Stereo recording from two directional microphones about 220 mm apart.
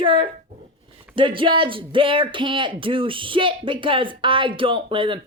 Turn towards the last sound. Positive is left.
turn(degrees=-20)  # may be behind; listen again after turning